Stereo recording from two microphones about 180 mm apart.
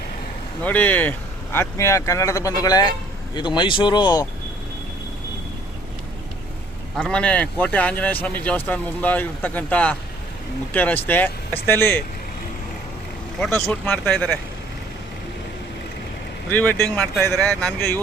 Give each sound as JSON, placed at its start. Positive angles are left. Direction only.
{"t": 0.6, "sound": "speech", "side_deg": 10}
{"t": 6.9, "sound": "speech", "side_deg": 5}
{"t": 13.4, "sound": "speech", "side_deg": 5}
{"t": 16.5, "sound": "speech", "side_deg": 10}
{"t": 17.3, "sound": "speech", "side_deg": 0}
{"t": 17.7, "sound": "speech", "side_deg": 15}